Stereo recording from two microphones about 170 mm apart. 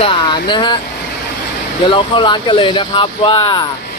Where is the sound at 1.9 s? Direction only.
30° left (ahead or behind).